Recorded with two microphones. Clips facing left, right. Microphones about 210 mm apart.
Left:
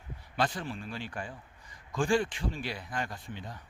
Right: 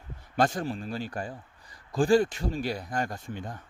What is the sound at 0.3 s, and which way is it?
A man's voice, 45° right (ahead or behind).